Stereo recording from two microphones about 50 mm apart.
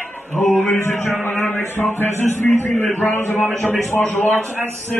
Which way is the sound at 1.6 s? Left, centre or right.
Left.